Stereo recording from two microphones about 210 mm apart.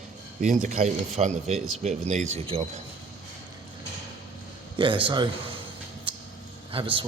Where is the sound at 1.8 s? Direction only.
35° right (ahead or behind).